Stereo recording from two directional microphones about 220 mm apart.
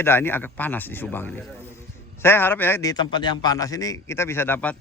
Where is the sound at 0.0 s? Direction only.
10° left (ahead or behind).